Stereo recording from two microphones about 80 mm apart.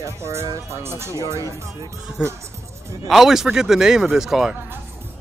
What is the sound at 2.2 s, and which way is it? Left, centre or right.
Speech, centre.